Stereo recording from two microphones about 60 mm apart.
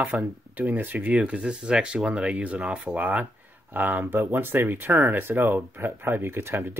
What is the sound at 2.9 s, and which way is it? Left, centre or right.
Speech, right.